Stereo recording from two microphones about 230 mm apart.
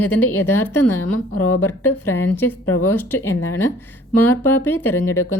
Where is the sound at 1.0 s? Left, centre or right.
Left.